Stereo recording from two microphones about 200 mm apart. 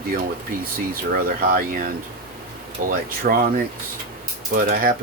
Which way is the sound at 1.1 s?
45° right (ahead or behind).